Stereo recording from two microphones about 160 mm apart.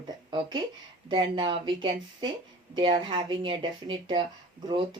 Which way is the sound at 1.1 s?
30° right (ahead or behind).